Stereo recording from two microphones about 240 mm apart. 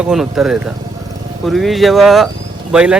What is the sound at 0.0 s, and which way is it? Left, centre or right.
Speech, centre.